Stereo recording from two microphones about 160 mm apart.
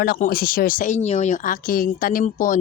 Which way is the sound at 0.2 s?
65° left (ahead or behind).